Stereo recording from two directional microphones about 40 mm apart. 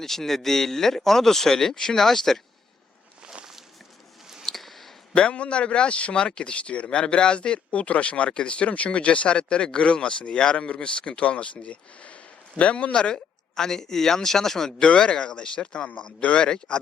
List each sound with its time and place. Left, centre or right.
0.0 s speech: centre
4.4 s a sound: centre
5.1 s speech: left
13.6 s speech: centre
14.8 s speech: left